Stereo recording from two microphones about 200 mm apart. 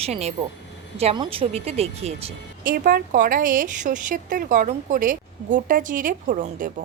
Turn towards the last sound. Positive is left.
turn(degrees=-40)  # may be behind; listen again after turning